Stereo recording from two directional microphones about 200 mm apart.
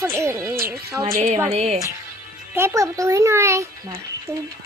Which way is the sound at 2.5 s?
15° right (ahead or behind).